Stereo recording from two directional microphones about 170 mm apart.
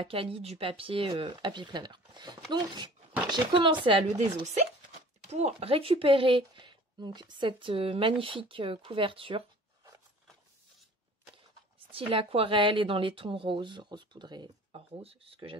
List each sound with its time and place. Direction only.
0.0 s speech: 35° right (ahead or behind)
5.3 s speech: 35° right (ahead or behind)
11.9 s speech: 35° right (ahead or behind)